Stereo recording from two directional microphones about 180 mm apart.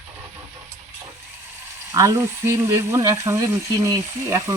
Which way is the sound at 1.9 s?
15° right (ahead or behind).